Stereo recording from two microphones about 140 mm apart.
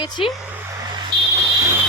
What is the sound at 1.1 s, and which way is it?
Fire alarm, 35° right (ahead or behind).